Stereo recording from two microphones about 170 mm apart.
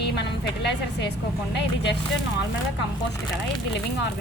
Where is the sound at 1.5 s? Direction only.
85° left.